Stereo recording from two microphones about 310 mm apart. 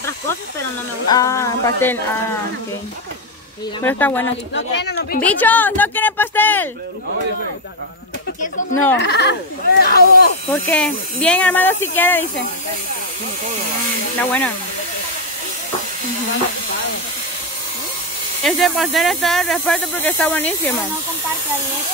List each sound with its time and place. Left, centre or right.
1.0 s speech: centre
3.8 s speech: centre
4.6 s speech: left
5.2 s speech: centre
8.9 s speech: left
10.5 s speech: centre
18.4 s speech: centre